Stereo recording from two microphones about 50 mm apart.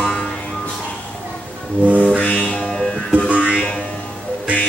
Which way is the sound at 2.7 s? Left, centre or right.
Centre.